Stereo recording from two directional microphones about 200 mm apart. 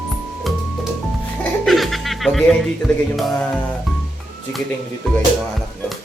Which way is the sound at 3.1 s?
Centre (ahead or behind).